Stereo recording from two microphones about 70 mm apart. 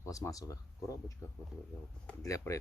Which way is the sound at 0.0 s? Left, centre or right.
Left.